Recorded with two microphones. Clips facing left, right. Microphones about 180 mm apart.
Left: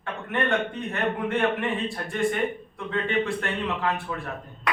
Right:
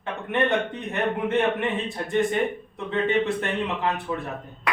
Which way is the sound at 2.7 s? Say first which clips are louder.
Right 4 dB; 20° right (ahead or behind).